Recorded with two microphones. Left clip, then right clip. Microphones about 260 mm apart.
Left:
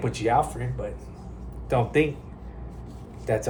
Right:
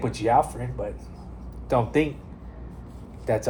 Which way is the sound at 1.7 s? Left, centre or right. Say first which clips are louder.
Even; right.